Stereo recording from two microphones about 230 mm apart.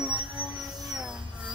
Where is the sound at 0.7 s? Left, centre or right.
Centre.